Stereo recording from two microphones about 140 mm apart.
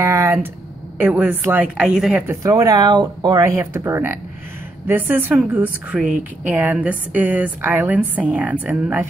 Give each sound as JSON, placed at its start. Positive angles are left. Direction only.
{"t": 0.0, "sound": "a sound", "side_deg": -20}
{"t": 0.9, "sound": "a woman's voice", "side_deg": -10}
{"t": 2.2, "sound": "a woman's voice", "side_deg": -25}